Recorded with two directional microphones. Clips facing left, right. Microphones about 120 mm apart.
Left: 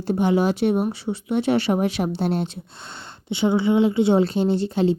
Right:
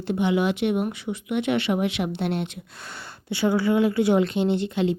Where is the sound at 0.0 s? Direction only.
40° left (ahead or behind).